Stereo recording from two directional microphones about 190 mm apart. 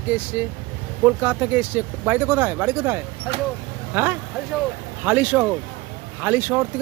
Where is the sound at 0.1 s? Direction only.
10° right (ahead or behind).